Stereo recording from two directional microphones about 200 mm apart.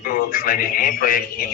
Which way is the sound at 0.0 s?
45° left (ahead or behind).